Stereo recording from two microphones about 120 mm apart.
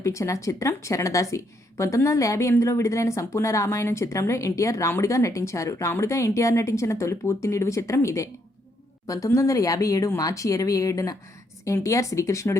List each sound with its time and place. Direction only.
0.0 s speech: 25° left (ahead or behind)